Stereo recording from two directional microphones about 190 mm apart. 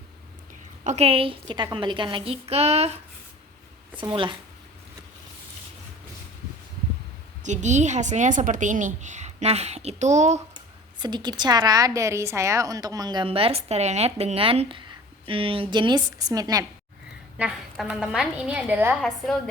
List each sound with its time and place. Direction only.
0.9 s a woman's voice: 35° right (ahead or behind)
4.0 s a woman's voice: 25° right (ahead or behind)
7.4 s a woman's voice: 40° right (ahead or behind)
11.0 s a woman's voice: 25° right (ahead or behind)
17.3 s a woman's voice: 5° right (ahead or behind)